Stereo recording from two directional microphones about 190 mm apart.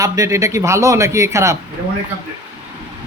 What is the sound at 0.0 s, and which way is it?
Speech, 15° right (ahead or behind).